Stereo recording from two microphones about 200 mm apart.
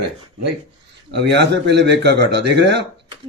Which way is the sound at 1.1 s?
60° right (ahead or behind).